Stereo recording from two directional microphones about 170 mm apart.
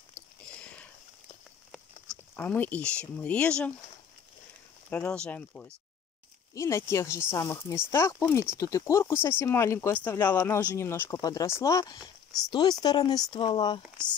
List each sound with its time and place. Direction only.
2.0 s speech: 10° left (ahead or behind)
4.8 s speech: 10° left (ahead or behind); by 13.7 s 25° left (ahead or behind)